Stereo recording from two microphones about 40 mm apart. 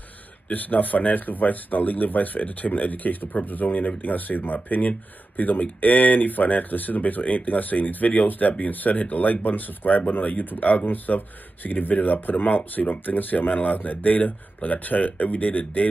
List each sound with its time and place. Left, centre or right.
0.5 s speech: left